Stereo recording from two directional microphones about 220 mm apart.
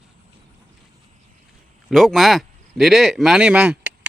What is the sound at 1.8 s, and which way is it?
Speech, centre (ahead or behind).